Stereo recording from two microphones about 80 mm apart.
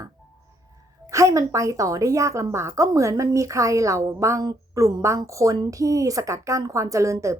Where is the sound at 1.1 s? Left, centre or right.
Right.